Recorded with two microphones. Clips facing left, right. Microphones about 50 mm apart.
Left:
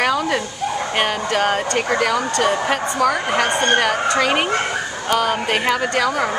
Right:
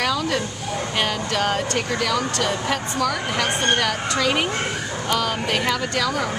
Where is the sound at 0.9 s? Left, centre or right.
Left.